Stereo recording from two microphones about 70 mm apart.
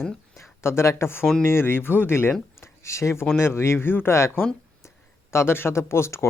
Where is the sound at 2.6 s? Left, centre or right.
Left.